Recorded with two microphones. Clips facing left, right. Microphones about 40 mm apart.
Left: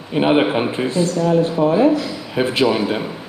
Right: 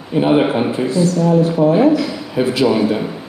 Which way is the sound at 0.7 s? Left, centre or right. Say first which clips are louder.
Right 3 dB; left.